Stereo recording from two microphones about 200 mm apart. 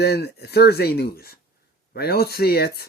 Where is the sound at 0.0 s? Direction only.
55° left (ahead or behind).